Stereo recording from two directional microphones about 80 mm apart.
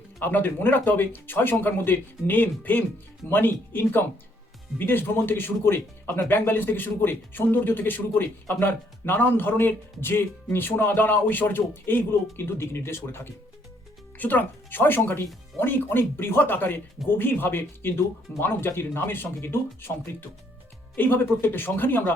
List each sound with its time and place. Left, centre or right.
0.2 s speech: left
20.9 s speech: left